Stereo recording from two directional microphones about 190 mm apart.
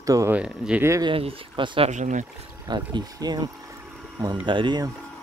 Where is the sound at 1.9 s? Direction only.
40° right (ahead or behind).